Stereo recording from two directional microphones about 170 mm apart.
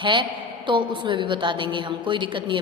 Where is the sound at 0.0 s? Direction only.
30° right (ahead or behind).